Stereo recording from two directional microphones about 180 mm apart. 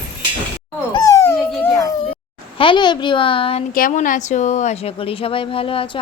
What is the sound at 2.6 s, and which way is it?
Speech, 25° left (ahead or behind).